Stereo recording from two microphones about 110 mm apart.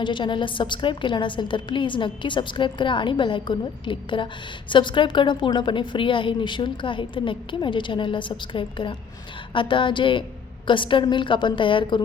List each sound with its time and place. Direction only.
0.0 s a woman's voice: 45° left (ahead or behind)